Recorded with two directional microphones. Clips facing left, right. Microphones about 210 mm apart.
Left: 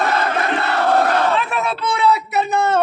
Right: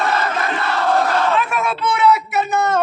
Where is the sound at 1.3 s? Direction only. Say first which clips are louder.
Right 1 dB; 30° left (ahead or behind).